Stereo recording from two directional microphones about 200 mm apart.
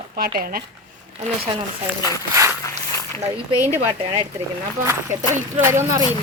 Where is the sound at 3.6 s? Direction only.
10° right (ahead or behind).